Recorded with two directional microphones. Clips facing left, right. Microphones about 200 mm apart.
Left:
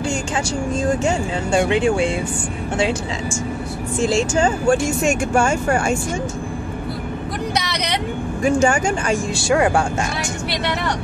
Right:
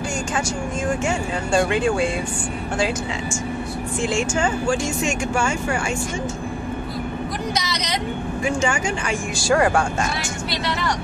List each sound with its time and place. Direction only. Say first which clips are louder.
1.5 s speech: left 2 dB; 20° left (ahead or behind)
4.0 s speech: left 5 dB; 35° left (ahead or behind)
4.6 s speech: left 5 dB; 50° left (ahead or behind)
7.5 s speech: left 2 dB; 65° left (ahead or behind)
8.6 s speech: left 5 dB; 40° left (ahead or behind)
9.4 s speech: even; 25° left (ahead or behind)